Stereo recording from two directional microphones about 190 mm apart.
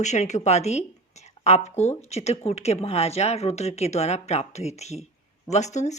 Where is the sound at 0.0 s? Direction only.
35° left (ahead or behind).